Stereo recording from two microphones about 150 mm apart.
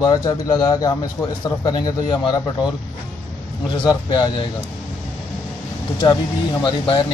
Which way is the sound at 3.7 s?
30° left (ahead or behind).